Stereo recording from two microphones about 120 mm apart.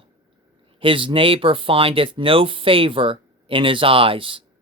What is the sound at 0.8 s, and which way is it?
Speech, 45° right (ahead or behind).